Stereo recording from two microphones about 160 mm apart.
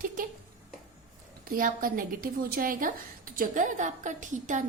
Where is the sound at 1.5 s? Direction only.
60° right (ahead or behind).